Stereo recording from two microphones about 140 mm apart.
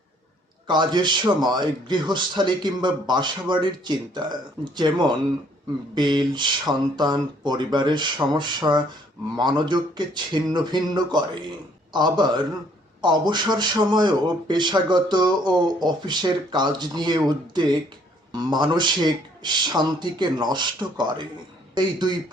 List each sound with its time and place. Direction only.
0.7 s a man's voice: 30° right (ahead or behind)